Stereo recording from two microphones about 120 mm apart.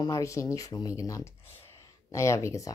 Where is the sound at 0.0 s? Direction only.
25° left (ahead or behind).